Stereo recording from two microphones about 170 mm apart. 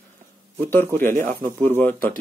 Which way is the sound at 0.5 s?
10° left (ahead or behind).